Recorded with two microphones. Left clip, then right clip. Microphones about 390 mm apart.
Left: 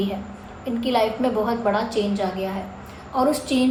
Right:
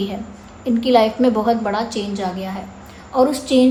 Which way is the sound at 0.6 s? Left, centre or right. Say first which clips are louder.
Right 7 dB; right.